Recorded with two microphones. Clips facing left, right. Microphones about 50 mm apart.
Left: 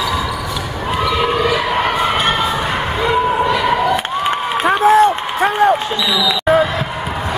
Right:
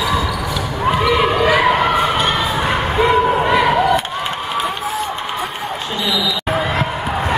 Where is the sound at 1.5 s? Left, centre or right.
Right.